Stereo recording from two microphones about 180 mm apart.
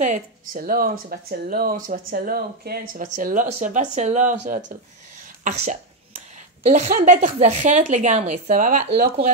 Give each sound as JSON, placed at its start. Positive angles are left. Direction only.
{"t": 0.0, "sound": "a woman's voice", "side_deg": -50}
{"t": 5.4, "sound": "a woman's voice", "side_deg": -40}